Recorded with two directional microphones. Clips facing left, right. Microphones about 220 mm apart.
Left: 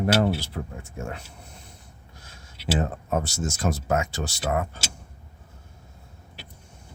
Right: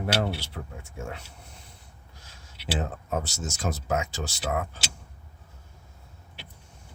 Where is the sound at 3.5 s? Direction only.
55° left (ahead or behind).